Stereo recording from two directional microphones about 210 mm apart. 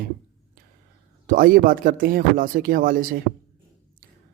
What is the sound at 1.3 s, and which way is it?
Speech, 40° right (ahead or behind).